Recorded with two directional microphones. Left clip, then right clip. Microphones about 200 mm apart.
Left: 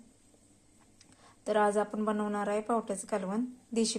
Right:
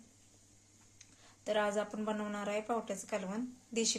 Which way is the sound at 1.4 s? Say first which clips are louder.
Left 6 dB; 20° left (ahead or behind).